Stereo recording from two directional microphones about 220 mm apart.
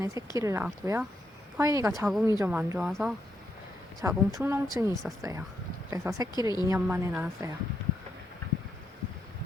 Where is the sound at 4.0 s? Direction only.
15° right (ahead or behind).